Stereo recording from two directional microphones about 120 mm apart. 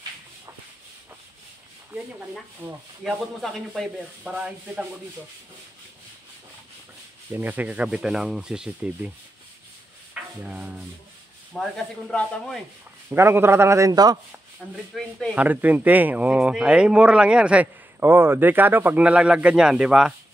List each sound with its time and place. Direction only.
2.6 s a man's voice: 20° right (ahead or behind)
3.0 s speech: centre (ahead or behind)
7.3 s speech: 15° right (ahead or behind)
10.4 s speech: 10° right (ahead or behind)
11.5 s speech: 5° left (ahead or behind)
13.1 s a man's voice: 20° right (ahead or behind)
14.6 s speech: centre (ahead or behind)
15.3 s speech: 15° right (ahead or behind)